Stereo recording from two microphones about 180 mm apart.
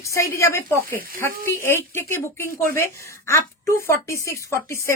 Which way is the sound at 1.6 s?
15° left (ahead or behind).